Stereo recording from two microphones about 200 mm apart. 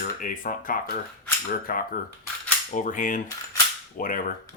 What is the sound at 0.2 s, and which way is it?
Speech, 40° left (ahead or behind).